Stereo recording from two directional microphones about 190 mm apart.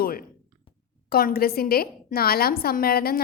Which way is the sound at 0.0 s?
50° left (ahead or behind).